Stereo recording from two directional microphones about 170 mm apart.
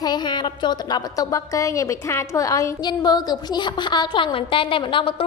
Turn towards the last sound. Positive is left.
turn(degrees=30)  # may be behind; listen again after turning